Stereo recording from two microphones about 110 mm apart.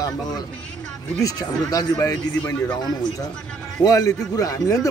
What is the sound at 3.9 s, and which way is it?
A man's voice, 30° left (ahead or behind).